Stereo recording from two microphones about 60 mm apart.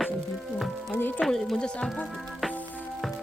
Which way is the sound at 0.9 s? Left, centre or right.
Left.